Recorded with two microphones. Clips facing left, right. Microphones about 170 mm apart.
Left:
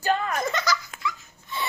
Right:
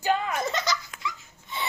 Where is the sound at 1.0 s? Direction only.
20° right (ahead or behind).